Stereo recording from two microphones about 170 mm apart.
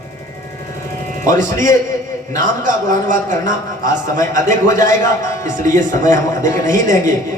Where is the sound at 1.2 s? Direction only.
50° right (ahead or behind).